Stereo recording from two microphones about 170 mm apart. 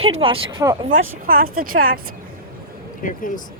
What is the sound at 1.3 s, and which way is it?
Speech, 60° right (ahead or behind).